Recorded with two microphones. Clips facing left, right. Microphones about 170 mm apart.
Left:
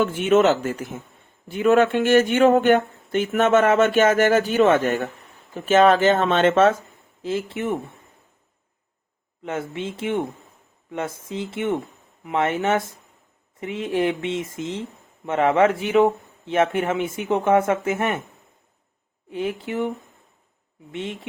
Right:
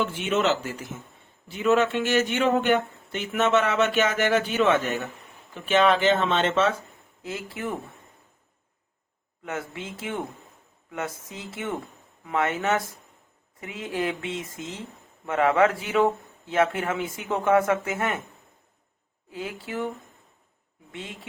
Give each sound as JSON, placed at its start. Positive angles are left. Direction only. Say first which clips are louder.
{"t": 0.0, "sound": "speech", "louder": "left 7 dB", "side_deg": 50}
{"t": 7.2, "sound": "speech", "louder": "left 7 dB", "side_deg": 25}
{"t": 9.4, "sound": "speech", "louder": "left 5 dB", "side_deg": 25}
{"t": 19.3, "sound": "speech", "louder": "left 7 dB", "side_deg": 25}
{"t": 20.9, "sound": "speech", "louder": "left 8 dB", "side_deg": 25}